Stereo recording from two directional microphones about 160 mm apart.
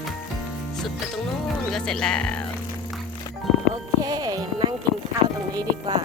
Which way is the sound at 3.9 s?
25° right (ahead or behind).